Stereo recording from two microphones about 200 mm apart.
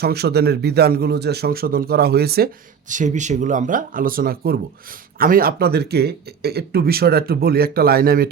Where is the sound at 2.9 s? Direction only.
40° right (ahead or behind).